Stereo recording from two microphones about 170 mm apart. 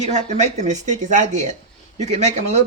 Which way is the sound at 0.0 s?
40° right (ahead or behind).